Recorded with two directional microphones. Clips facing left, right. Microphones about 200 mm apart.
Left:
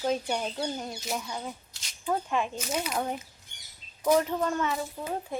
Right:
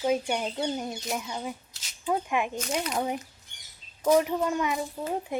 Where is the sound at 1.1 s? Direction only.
5° right (ahead or behind).